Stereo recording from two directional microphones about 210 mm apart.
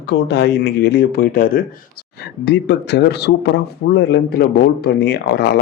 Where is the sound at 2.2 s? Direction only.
55° left (ahead or behind).